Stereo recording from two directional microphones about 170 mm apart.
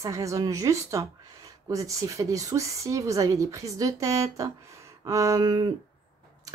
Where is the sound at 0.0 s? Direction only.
20° right (ahead or behind).